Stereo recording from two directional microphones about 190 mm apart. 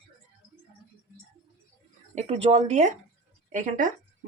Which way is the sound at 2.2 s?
35° right (ahead or behind).